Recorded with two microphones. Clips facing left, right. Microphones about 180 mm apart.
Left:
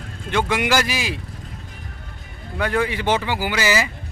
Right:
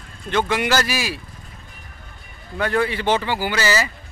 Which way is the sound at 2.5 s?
10° left (ahead or behind).